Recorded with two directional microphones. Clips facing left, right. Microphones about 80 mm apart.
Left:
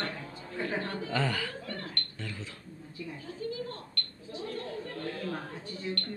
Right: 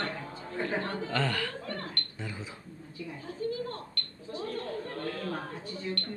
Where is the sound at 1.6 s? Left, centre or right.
Right.